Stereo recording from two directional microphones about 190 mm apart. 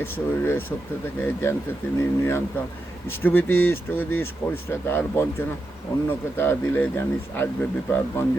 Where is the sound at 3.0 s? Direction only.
10° left (ahead or behind).